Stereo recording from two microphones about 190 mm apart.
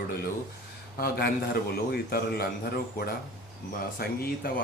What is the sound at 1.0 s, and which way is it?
A man's voice, 55° left (ahead or behind).